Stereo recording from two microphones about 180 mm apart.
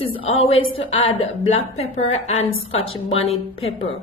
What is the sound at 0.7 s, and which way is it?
A woman's voice, 35° left (ahead or behind).